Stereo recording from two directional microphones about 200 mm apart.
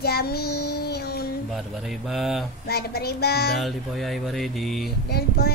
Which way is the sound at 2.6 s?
50° left (ahead or behind).